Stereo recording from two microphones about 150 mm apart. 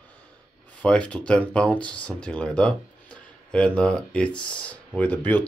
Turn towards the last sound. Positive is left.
turn(degrees=10)  # may be behind; listen again after turning